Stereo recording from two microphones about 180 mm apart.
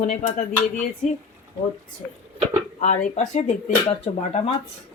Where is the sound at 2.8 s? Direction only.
40° left (ahead or behind).